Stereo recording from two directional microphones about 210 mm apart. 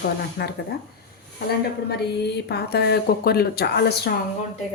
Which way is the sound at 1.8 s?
50° left (ahead or behind).